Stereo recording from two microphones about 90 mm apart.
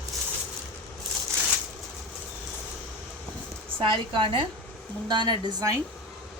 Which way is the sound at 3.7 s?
75° right (ahead or behind).